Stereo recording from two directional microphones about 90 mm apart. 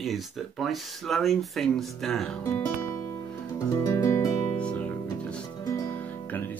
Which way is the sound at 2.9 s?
45° left (ahead or behind).